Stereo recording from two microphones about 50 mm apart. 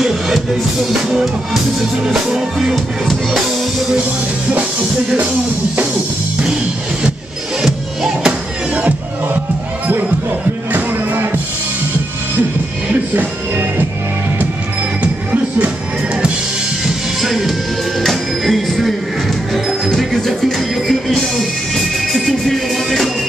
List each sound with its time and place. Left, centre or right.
0.8 s music: centre
7.6 s music: centre
8.3 s music: right
10.7 s music: right
13.1 s music: right
15.0 s music: right
16.8 s music: centre